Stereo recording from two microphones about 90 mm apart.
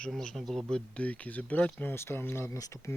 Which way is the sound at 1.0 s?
15° left (ahead or behind).